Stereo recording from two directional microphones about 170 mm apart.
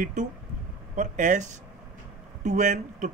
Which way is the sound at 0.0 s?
45° right (ahead or behind).